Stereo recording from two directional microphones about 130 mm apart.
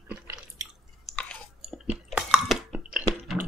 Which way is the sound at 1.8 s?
5° right (ahead or behind).